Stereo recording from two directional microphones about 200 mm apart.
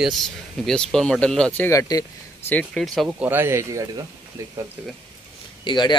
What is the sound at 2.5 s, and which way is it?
Speech, 5° left (ahead or behind).